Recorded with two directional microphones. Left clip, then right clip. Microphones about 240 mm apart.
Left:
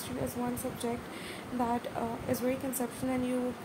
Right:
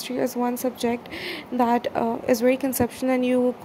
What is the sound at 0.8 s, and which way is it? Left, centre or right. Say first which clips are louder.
A woman's voice: right 10 dB; right.